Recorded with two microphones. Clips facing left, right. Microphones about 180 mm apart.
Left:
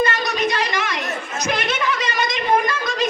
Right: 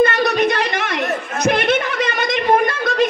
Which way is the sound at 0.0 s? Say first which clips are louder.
Right 6 dB; 60° right (ahead or behind).